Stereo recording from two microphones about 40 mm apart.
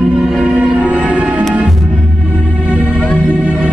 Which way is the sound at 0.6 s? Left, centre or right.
Right.